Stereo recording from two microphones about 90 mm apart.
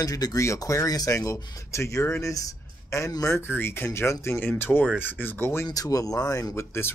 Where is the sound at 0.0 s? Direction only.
40° left (ahead or behind).